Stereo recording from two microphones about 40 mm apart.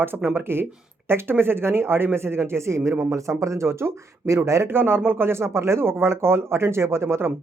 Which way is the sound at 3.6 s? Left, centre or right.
Right.